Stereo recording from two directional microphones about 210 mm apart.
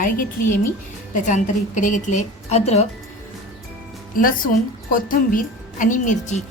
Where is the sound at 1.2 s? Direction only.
35° left (ahead or behind).